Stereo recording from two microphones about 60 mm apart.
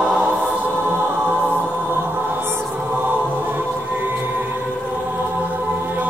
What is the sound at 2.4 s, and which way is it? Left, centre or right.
Mantra, right.